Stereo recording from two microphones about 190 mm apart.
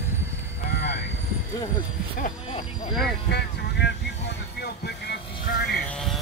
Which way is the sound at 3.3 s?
60° left (ahead or behind).